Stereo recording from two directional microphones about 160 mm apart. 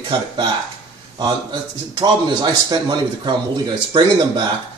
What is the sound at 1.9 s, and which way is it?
Speech, 25° right (ahead or behind).